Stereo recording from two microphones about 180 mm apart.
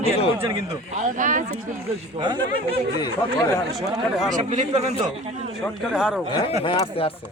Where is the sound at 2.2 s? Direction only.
25° right (ahead or behind).